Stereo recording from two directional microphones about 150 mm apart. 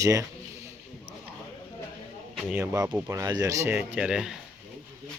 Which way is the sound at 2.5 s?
15° right (ahead or behind).